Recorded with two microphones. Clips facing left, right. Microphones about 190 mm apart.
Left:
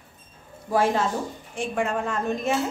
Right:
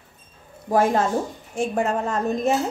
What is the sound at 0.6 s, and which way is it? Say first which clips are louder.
A woman's voice: right 3 dB; 45° right (ahead or behind).